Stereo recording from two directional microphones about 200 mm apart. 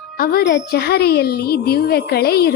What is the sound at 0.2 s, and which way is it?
A woman's voice, 50° left (ahead or behind).